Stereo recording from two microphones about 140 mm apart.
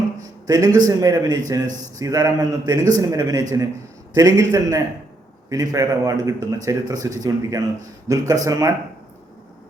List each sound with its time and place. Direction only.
0.4 s a man's voice: 25° right (ahead or behind)